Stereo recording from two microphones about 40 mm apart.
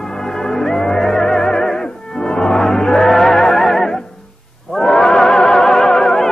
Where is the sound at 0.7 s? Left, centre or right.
Centre.